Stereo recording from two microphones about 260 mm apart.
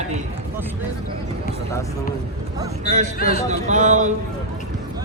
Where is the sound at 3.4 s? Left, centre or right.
Right.